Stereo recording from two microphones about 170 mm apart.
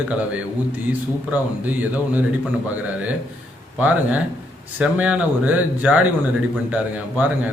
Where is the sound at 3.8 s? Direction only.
10° right (ahead or behind).